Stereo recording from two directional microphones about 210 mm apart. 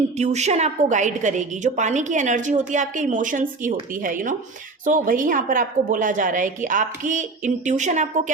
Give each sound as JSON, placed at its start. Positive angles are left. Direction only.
{"t": 0.2, "sound": "a woman's voice", "side_deg": -35}